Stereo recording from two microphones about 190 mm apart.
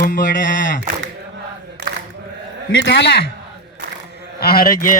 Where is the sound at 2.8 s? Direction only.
65° left (ahead or behind).